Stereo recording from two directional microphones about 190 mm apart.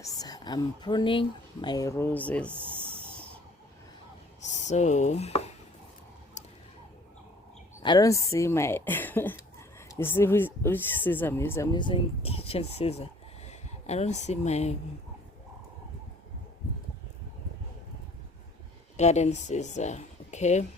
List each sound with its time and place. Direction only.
0.0 s speech: 20° left (ahead or behind)
2.6 s snake: 30° right (ahead or behind)
4.4 s speech: 35° left (ahead or behind)
7.8 s speech: 20° left (ahead or behind)
18.9 s speech: 35° left (ahead or behind)